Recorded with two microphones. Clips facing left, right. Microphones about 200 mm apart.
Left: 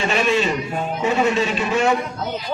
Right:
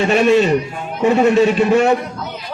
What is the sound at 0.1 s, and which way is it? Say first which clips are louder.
A man's voice: right 8 dB; 55° right (ahead or behind).